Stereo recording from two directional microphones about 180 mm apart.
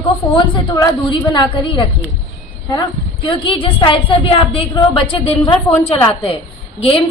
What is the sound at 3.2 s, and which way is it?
A woman's voice, 30° left (ahead or behind).